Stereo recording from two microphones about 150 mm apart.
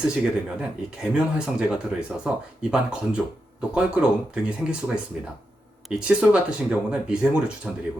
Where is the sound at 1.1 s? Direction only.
5° right (ahead or behind).